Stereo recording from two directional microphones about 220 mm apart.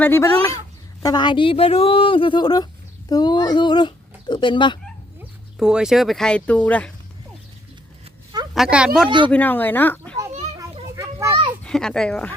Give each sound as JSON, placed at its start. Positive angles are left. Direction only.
{"t": 0.0, "sound": "speech", "side_deg": 10}
{"t": 5.5, "sound": "speech", "side_deg": -5}
{"t": 8.5, "sound": "speech", "side_deg": -5}
{"t": 9.0, "sound": "speech", "side_deg": -20}
{"t": 9.3, "sound": "speech", "side_deg": 10}
{"t": 10.9, "sound": "children playing", "side_deg": -15}
{"t": 11.6, "sound": "speech", "side_deg": 5}